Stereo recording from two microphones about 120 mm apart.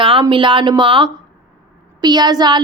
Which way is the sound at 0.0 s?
45° right (ahead or behind).